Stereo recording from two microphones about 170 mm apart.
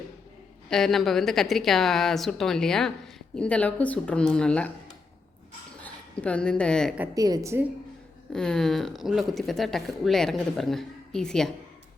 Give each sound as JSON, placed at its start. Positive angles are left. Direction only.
{"t": 0.7, "sound": "speech", "side_deg": 0}
{"t": 5.8, "sound": "a woman's voice", "side_deg": 5}
{"t": 7.1, "sound": "a woman's voice", "side_deg": -20}
{"t": 8.3, "sound": "speech", "side_deg": 5}